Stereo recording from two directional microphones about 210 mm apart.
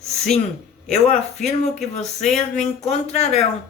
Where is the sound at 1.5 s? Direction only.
30° left (ahead or behind).